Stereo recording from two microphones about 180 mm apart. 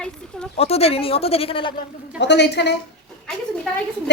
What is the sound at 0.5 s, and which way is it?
Speech, 35° left (ahead or behind).